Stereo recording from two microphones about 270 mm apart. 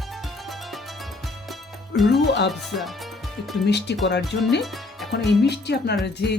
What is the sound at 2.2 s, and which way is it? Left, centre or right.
Speech, left.